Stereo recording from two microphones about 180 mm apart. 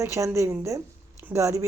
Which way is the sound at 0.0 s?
15° right (ahead or behind).